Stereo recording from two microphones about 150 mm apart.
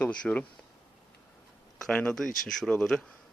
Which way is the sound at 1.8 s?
5° left (ahead or behind).